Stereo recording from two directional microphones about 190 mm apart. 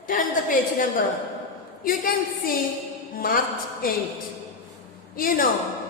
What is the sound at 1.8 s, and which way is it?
Speech, 45° left (ahead or behind).